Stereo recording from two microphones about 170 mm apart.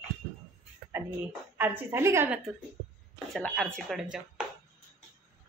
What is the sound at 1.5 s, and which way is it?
Speech, 10° right (ahead or behind).